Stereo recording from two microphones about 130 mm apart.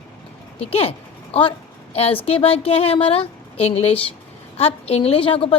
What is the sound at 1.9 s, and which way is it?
A woman's voice, 45° left (ahead or behind).